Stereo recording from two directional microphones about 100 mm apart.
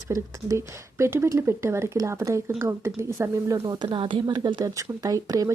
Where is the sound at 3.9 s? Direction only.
60° right (ahead or behind).